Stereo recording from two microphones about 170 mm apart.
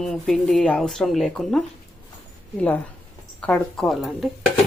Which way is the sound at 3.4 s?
5° left (ahead or behind).